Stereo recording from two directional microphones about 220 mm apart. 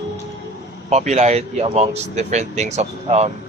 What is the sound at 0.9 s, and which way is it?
Speech, 30° right (ahead or behind).